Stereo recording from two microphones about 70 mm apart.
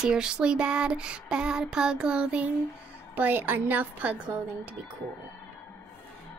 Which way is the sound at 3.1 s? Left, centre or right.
Right.